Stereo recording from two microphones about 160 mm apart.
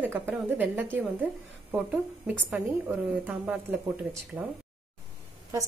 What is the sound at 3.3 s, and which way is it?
A woman's voice, 10° right (ahead or behind).